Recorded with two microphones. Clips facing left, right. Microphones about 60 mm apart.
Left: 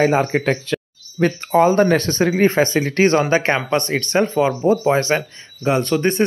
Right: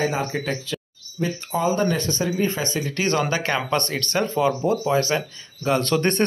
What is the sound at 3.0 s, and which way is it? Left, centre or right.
Speech, left.